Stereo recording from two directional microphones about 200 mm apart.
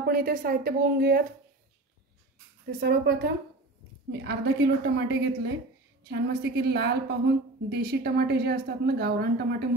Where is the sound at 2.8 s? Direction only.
50° right (ahead or behind).